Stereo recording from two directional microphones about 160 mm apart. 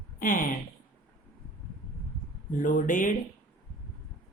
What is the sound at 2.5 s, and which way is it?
Speech, 55° left (ahead or behind).